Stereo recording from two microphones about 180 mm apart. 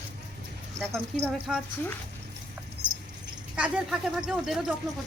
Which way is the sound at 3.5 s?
5° right (ahead or behind).